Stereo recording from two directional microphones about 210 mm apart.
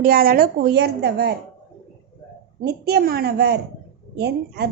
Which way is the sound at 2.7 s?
50° right (ahead or behind).